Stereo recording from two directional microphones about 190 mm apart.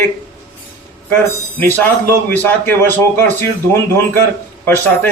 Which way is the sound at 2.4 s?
10° left (ahead or behind).